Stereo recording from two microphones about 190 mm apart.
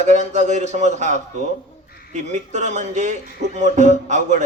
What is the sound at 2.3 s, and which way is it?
A man's voice, 40° right (ahead or behind).